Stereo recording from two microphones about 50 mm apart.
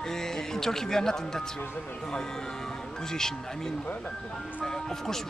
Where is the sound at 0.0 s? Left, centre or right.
Centre.